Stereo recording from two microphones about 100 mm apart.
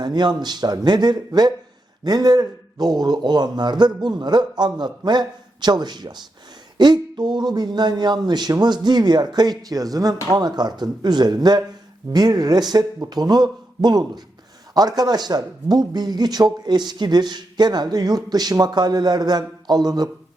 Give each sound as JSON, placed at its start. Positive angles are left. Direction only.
{"t": 0.0, "sound": "speech", "side_deg": -45}